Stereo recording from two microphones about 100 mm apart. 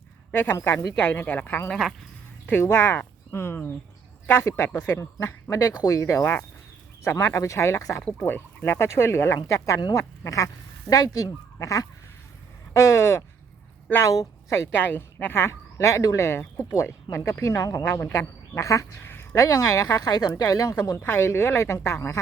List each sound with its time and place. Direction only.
0.6 s speech: 25° left (ahead or behind)
12.7 s a sound: 25° left (ahead or behind)
14.1 s speech: 35° left (ahead or behind)
14.8 s speech: 20° left (ahead or behind); by 21.0 s 35° left (ahead or behind)
21.0 s speech: 25° left (ahead or behind)